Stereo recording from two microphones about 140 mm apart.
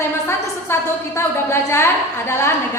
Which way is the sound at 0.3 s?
20° left (ahead or behind).